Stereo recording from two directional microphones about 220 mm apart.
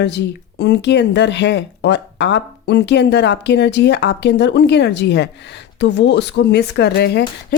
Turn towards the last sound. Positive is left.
turn(degrees=50)  # may be behind; listen again after turning